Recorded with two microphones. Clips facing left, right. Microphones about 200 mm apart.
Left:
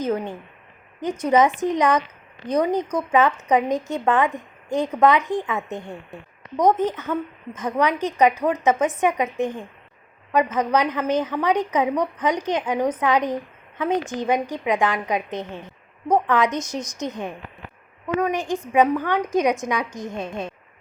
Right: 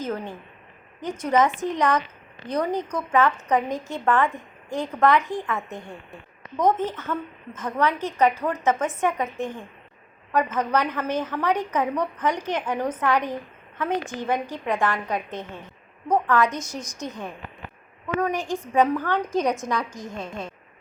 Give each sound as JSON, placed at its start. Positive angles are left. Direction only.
{"t": 0.0, "sound": "a woman's voice", "side_deg": 20}